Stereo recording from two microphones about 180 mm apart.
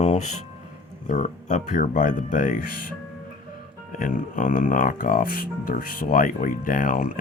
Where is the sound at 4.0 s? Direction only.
50° left (ahead or behind).